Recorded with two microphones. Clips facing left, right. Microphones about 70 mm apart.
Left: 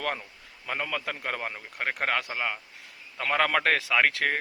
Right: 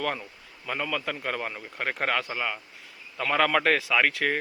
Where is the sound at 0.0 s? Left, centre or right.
Left.